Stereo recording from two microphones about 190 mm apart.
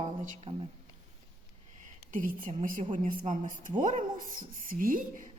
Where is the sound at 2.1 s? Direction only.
45° right (ahead or behind).